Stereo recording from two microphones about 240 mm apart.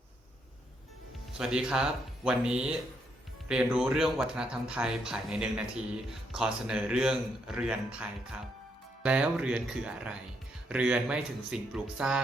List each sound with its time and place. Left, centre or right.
1.4 s speech: centre